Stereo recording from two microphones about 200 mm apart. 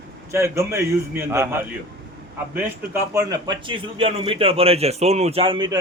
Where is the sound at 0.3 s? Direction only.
15° right (ahead or behind).